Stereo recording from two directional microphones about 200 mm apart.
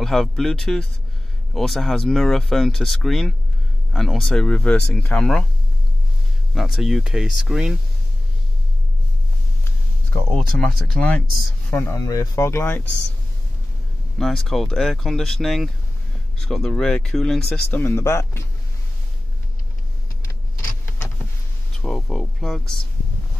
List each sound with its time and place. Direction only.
0.0 s speech: centre (ahead or behind)
6.5 s speech: centre (ahead or behind)
10.3 s speech: 5° left (ahead or behind)
14.1 s speech: centre (ahead or behind)
21.8 s a sound: 5° left (ahead or behind)